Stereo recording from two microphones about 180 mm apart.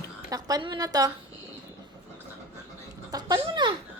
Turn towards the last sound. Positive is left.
turn(degrees=-25)  # may be behind; listen again after turning